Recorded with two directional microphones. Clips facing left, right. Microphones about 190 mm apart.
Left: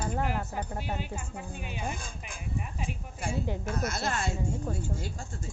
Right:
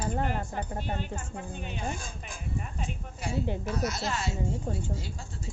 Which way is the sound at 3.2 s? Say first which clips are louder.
Right 1 dB; 50° left (ahead or behind).